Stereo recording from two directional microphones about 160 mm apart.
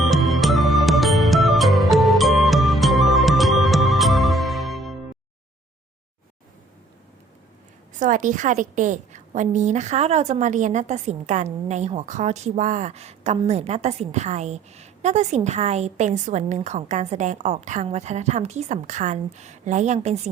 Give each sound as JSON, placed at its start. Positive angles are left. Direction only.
{"t": 0.1, "sound": "music", "side_deg": 0}
{"t": 7.9, "sound": "a woman's voice", "side_deg": -50}